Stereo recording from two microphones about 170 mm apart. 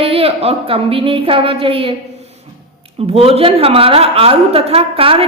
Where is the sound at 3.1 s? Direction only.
35° right (ahead or behind).